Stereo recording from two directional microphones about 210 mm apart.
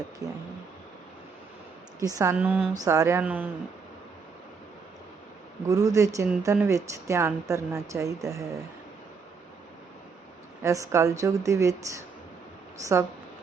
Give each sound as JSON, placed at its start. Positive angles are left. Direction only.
{"t": 0.2, "sound": "speech", "side_deg": -15}
{"t": 2.0, "sound": "speech", "side_deg": -15}
{"t": 5.6, "sound": "speech", "side_deg": -15}
{"t": 10.6, "sound": "speech", "side_deg": -15}